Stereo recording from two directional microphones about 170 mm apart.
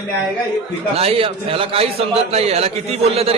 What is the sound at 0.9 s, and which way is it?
A man's voice, 35° right (ahead or behind).